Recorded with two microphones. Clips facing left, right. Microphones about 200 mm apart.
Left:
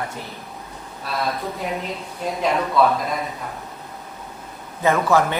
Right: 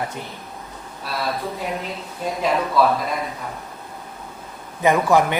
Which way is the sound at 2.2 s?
Centre (ahead or behind).